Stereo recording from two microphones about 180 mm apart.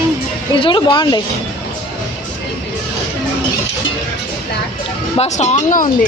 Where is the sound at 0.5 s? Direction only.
25° left (ahead or behind).